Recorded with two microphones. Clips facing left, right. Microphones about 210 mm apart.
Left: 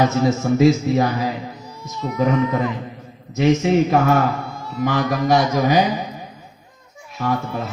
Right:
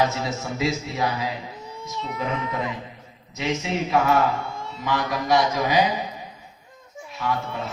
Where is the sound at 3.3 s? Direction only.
50° left (ahead or behind).